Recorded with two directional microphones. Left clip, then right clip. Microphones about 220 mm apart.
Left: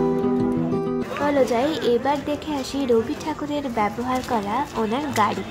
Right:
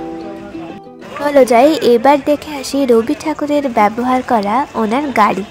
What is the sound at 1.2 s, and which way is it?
Speech, 35° right (ahead or behind).